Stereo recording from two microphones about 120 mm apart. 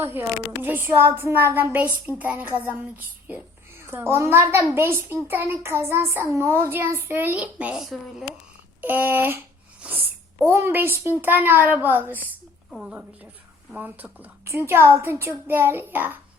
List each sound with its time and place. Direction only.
0.0 s a woman's voice: 20° right (ahead or behind)